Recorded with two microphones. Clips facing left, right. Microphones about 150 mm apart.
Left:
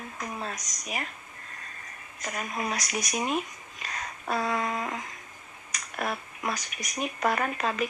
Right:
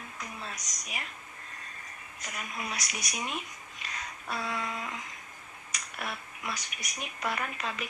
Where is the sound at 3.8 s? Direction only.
45° left (ahead or behind).